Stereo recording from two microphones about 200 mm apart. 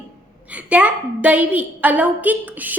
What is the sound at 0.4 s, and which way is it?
A woman's voice, 5° right (ahead or behind).